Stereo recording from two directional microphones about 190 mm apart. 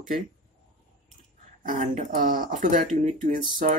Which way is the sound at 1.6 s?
40° right (ahead or behind).